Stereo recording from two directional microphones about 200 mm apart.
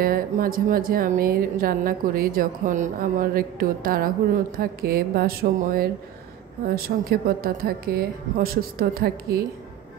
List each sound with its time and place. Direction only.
0.0 s a woman's voice: 45° right (ahead or behind)